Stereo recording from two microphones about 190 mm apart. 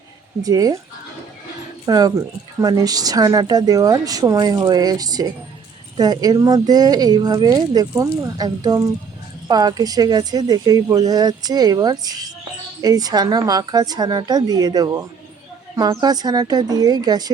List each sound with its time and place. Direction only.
0.4 s speech: 20° right (ahead or behind)
1.9 s speech: 20° right (ahead or behind)